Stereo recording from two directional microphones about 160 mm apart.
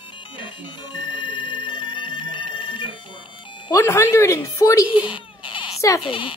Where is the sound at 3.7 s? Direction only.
20° left (ahead or behind).